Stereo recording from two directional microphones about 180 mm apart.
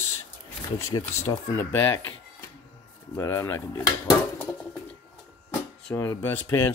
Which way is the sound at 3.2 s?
15° left (ahead or behind).